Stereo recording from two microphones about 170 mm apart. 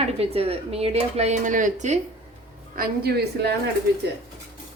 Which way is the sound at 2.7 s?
60° right (ahead or behind).